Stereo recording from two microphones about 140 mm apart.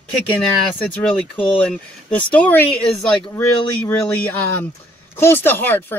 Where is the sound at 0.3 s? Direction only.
10° left (ahead or behind).